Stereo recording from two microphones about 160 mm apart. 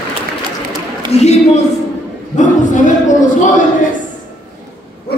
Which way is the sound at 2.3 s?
50° left (ahead or behind).